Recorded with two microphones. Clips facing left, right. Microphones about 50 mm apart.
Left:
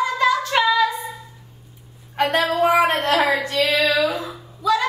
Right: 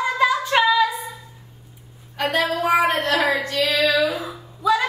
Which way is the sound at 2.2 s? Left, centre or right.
Left.